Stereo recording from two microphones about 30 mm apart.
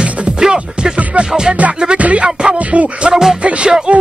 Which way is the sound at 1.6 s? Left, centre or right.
Right.